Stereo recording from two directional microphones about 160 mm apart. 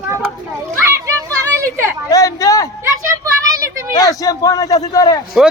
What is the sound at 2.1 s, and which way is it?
Speech, 20° left (ahead or behind).